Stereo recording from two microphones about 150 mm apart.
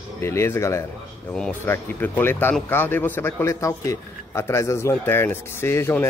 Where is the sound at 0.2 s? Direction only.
20° left (ahead or behind).